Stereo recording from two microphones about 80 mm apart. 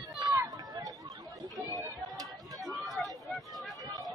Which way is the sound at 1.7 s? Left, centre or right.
Right.